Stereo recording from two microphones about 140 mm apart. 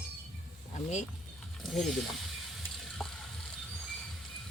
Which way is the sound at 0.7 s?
55° left (ahead or behind).